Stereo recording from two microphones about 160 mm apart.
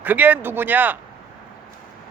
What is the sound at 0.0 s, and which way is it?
Speech, 10° right (ahead or behind).